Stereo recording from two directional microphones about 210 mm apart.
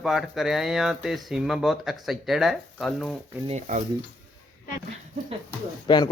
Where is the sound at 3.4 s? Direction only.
35° right (ahead or behind).